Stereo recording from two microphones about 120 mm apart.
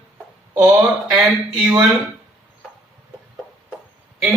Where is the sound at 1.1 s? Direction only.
15° right (ahead or behind).